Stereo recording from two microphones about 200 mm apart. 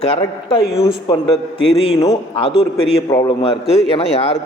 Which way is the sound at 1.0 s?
25° left (ahead or behind).